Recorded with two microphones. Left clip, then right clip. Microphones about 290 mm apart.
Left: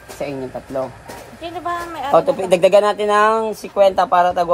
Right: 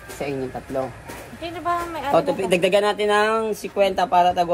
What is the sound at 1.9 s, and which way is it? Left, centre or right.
Speech, centre.